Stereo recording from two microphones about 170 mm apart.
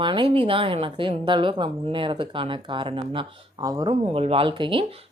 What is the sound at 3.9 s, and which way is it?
Speech, 35° right (ahead or behind).